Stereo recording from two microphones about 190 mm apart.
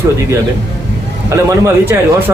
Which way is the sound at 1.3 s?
15° right (ahead or behind).